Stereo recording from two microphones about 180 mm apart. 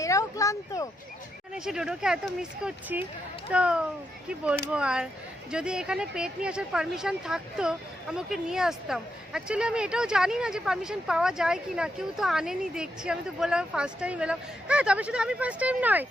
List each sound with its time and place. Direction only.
0.0 s speech: 20° left (ahead or behind)
1.5 s speech: 5° right (ahead or behind)